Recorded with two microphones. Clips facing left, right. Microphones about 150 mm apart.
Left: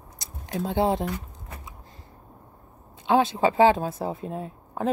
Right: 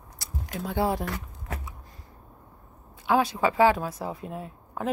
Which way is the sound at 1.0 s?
90° right.